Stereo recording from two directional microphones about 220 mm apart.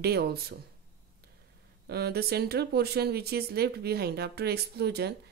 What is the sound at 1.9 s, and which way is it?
Speech, 45° right (ahead or behind).